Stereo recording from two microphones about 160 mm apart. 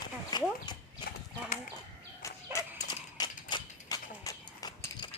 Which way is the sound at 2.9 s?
25° left (ahead or behind).